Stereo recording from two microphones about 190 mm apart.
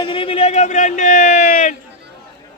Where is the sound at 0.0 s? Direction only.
25° left (ahead or behind).